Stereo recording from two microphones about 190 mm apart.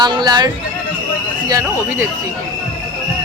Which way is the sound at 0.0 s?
20° right (ahead or behind).